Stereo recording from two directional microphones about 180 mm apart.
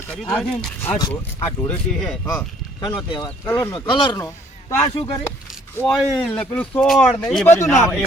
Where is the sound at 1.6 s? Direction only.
Centre (ahead or behind).